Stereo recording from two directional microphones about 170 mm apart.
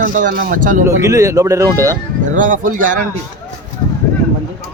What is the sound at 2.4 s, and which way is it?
Speech, 50° right (ahead or behind).